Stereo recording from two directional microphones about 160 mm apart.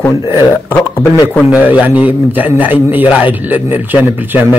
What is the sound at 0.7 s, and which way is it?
Speech, 15° left (ahead or behind).